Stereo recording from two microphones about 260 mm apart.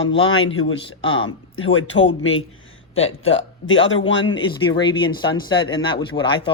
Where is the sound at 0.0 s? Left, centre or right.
Left.